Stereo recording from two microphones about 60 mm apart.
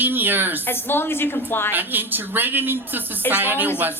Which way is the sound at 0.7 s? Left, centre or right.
Left.